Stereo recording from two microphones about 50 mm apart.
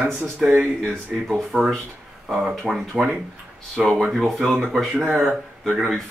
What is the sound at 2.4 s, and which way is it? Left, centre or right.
Speech, centre.